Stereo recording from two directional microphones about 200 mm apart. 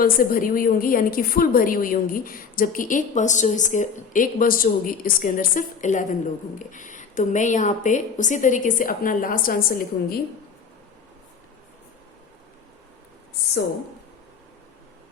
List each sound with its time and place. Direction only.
0.0 s a woman's voice: 45° left (ahead or behind)